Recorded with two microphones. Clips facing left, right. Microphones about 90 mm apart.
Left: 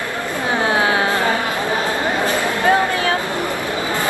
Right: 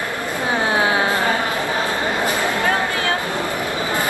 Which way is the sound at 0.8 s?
25° right (ahead or behind).